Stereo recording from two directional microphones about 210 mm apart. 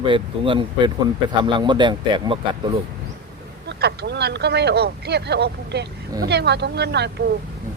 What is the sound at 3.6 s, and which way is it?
Speech, 55° right (ahead or behind).